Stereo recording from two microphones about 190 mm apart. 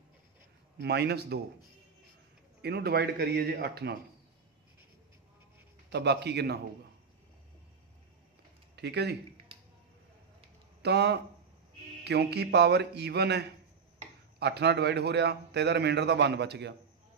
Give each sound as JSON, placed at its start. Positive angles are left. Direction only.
{"t": 0.8, "sound": "a man's voice", "side_deg": -60}
{"t": 2.6, "sound": "a man's voice", "side_deg": -60}
{"t": 5.9, "sound": "a man's voice", "side_deg": -60}
{"t": 8.7, "sound": "a man's voice", "side_deg": -60}
{"t": 10.8, "sound": "a man's voice", "side_deg": -60}